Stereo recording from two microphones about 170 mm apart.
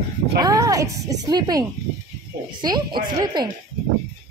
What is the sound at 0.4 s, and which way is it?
Speech, 20° right (ahead or behind).